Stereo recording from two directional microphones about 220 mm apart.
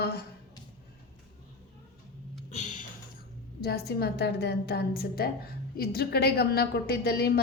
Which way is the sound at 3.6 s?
45° left (ahead or behind).